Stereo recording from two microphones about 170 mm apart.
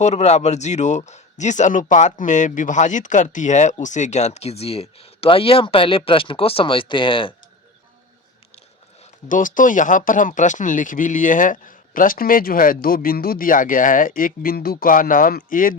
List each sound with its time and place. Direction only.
0.0 s speech: 40° left (ahead or behind)
9.3 s speech: 50° left (ahead or behind)